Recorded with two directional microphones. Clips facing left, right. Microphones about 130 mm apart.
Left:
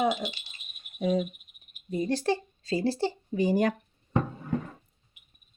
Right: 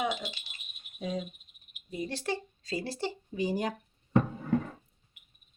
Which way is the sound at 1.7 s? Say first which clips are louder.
Left 8 dB; 45° left (ahead or behind).